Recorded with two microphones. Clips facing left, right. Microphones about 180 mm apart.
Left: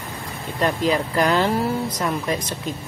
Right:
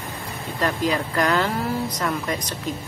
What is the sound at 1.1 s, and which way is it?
Speech, 25° left (ahead or behind).